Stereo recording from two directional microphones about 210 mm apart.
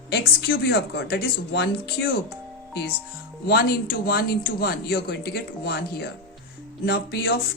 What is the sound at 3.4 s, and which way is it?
Speech, 50° left (ahead or behind).